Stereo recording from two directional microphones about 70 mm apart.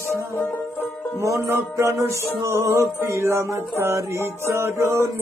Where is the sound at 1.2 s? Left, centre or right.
Right.